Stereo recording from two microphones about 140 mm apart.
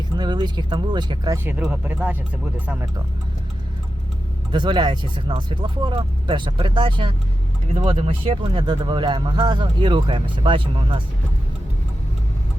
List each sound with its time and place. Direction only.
0.2 s speech: 30° right (ahead or behind)
1.6 s speech: 10° right (ahead or behind)
4.5 s speech: 35° right (ahead or behind)
7.7 s speech: 50° right (ahead or behind)